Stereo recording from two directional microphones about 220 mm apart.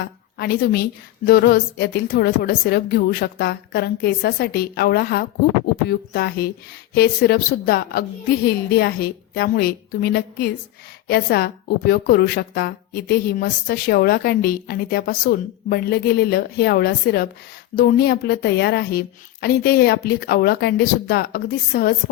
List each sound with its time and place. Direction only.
0.0 s a woman's voice: 45° left (ahead or behind)